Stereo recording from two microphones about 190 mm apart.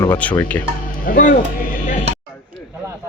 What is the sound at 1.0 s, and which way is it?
Speech, 45° left (ahead or behind).